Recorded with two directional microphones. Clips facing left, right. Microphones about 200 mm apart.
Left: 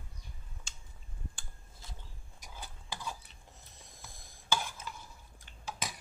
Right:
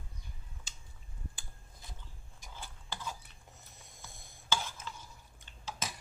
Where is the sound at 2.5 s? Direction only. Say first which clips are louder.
Left 1 dB; 15° left (ahead or behind).